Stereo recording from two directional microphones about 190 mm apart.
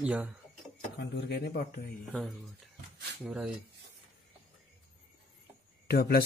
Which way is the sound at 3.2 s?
5° right (ahead or behind).